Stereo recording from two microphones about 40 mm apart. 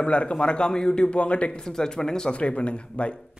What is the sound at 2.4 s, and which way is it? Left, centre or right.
Speech, left.